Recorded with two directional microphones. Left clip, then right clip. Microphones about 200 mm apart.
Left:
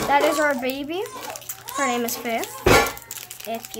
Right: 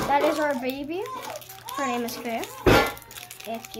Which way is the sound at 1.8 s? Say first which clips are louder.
Left 5 dB; 10° left (ahead or behind).